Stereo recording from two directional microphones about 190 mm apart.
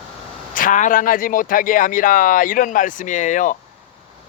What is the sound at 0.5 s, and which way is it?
A man's voice, 45° left (ahead or behind).